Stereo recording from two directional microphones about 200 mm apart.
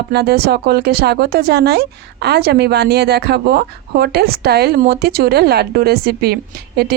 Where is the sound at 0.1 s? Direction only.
55° right (ahead or behind).